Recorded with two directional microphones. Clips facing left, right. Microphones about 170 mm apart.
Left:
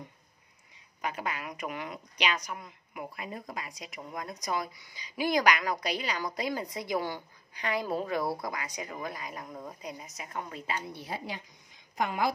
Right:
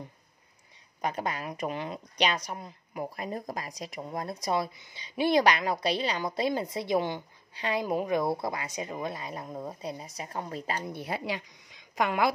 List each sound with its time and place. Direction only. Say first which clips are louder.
1.0 s speech: right 3 dB; 35° right (ahead or behind)
10.9 s a woman's voice: right 5 dB; 60° right (ahead or behind); by 12.3 s 75° right (ahead or behind)